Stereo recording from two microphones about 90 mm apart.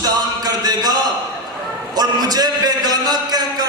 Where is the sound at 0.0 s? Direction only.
45° right (ahead or behind).